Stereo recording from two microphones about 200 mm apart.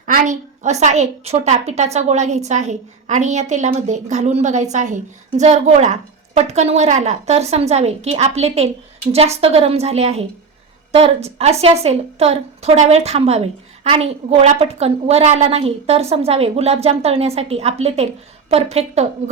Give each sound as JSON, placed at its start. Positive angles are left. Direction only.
{"t": 0.0, "sound": "a woman's voice", "side_deg": -40}